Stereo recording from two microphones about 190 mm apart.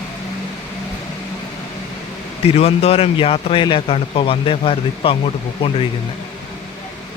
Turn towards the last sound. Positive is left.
turn(degrees=30)  # may be behind; listen again after turning